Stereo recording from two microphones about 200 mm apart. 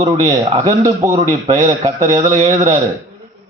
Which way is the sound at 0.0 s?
20° right (ahead or behind).